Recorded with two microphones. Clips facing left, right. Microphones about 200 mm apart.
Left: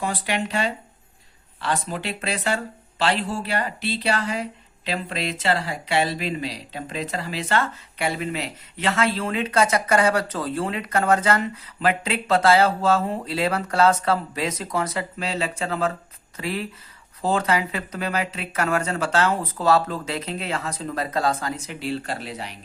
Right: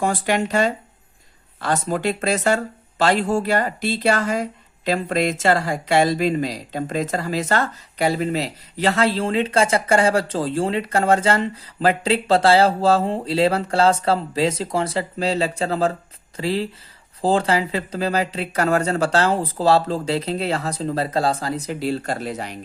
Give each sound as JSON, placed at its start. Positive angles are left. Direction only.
{"t": 0.0, "sound": "speech", "side_deg": -45}